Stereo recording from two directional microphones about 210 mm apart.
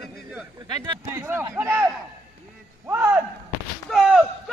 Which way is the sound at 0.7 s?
15° right (ahead or behind).